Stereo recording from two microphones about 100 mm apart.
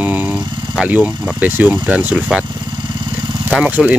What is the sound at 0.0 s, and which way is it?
Speech, 15° right (ahead or behind).